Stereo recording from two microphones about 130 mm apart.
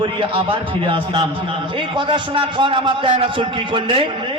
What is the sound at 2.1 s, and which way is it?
A man's voice, 40° right (ahead or behind).